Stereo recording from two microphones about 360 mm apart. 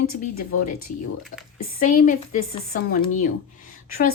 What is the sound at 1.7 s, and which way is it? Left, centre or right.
Speech, left.